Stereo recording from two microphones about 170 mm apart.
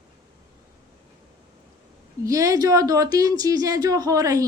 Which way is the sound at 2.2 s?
20° right (ahead or behind).